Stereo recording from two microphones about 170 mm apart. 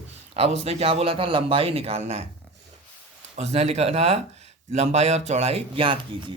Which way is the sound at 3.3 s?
40° right (ahead or behind).